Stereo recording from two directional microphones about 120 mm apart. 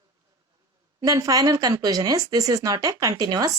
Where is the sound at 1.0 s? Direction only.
30° right (ahead or behind).